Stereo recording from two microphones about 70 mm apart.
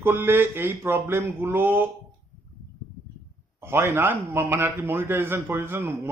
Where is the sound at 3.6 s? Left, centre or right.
Right.